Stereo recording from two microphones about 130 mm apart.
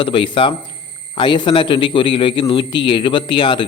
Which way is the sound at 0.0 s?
40° left (ahead or behind).